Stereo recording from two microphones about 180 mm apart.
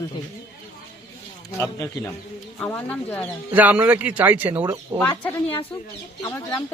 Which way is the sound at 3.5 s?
10° right (ahead or behind).